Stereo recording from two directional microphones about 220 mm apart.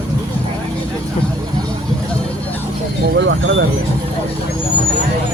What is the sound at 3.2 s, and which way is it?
Speech, 55° right (ahead or behind).